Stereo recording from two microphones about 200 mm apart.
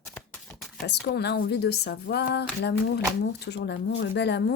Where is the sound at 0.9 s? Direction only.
55° left (ahead or behind).